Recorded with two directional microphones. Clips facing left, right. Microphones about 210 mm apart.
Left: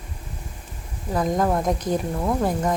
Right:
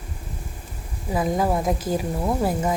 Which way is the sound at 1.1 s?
5° right (ahead or behind).